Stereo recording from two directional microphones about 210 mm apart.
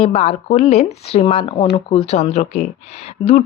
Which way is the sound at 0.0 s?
30° left (ahead or behind).